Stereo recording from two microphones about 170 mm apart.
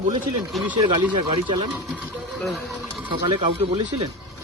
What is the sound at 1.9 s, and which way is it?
Speech, centre (ahead or behind).